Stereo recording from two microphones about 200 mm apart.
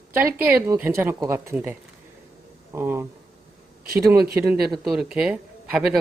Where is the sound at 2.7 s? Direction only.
10° right (ahead or behind).